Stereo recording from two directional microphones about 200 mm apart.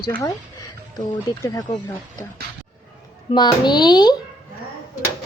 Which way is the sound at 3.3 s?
20° left (ahead or behind).